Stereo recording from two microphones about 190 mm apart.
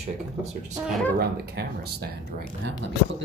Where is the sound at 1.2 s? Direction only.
55° right (ahead or behind).